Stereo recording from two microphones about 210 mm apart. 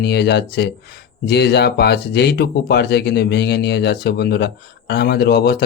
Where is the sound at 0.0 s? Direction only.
50° left (ahead or behind).